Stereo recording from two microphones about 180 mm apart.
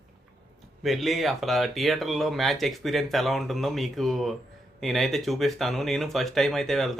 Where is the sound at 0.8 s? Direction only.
Centre (ahead or behind).